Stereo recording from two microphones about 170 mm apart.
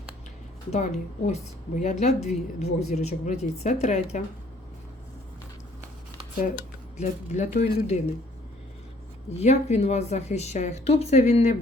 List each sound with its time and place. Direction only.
0.7 s speech: 40° left (ahead or behind)
7.0 s speech: 40° left (ahead or behind)
9.3 s speech: 40° left (ahead or behind)